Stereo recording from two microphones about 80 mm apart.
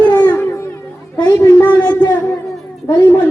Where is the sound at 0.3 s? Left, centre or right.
Left.